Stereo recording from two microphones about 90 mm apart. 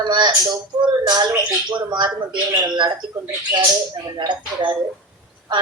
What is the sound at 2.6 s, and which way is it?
Speech, 50° right (ahead or behind).